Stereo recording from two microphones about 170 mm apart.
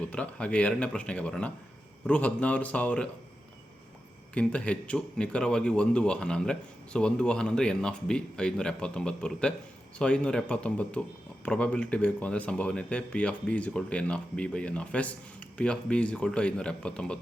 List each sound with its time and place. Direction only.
0.1 s speech: 5° left (ahead or behind)
4.4 s a man's voice: 5° left (ahead or behind)